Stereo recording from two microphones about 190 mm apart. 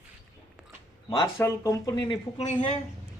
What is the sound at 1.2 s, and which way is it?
Speech, 15° left (ahead or behind).